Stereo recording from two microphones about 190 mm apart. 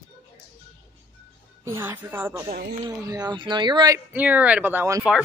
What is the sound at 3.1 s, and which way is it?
Speech, 20° right (ahead or behind).